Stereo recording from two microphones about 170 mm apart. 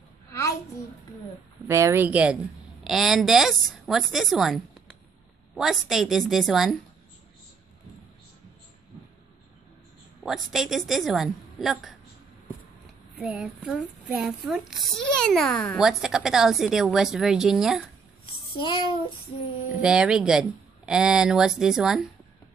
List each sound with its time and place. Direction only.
1.7 s a child's voice: 15° right (ahead or behind); by 4.6 s centre (ahead or behind)
5.6 s a child's voice: centre (ahead or behind)
10.2 s a child's voice: centre (ahead or behind)
13.2 s a child's voice: 5° right (ahead or behind)
18.6 s child singing: 30° left (ahead or behind)
19.8 s a child's voice: 5° right (ahead or behind)